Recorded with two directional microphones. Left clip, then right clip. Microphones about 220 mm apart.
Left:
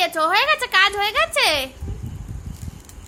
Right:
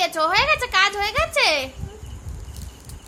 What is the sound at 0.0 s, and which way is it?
A woman's voice, 5° left (ahead or behind).